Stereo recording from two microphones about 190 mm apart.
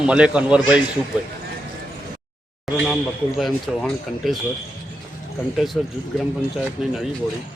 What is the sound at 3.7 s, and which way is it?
Speech, 5° right (ahead or behind).